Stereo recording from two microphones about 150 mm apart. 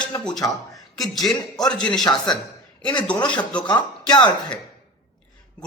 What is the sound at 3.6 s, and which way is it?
Speech, 30° left (ahead or behind).